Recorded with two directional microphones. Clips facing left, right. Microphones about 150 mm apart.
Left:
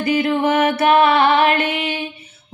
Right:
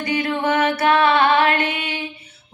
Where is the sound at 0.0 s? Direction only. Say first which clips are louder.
Left 4 dB; 25° left (ahead or behind).